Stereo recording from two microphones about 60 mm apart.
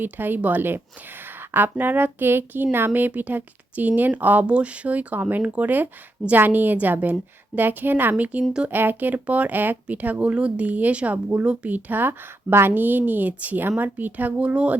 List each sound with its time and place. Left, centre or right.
0.0 s a woman's voice: right
14.3 s speech: centre